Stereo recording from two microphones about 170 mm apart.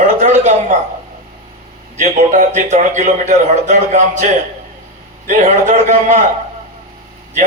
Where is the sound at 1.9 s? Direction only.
45° right (ahead or behind).